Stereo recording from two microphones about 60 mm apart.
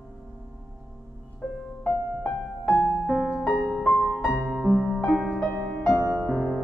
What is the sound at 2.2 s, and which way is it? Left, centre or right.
Music, centre.